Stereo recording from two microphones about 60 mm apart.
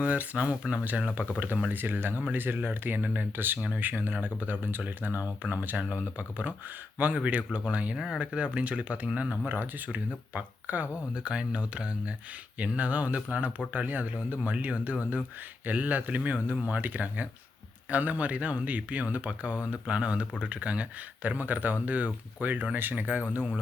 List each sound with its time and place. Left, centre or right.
0.0 s speech: right
7.9 s speech: centre
8.2 s speech: right
11.1 s speech: centre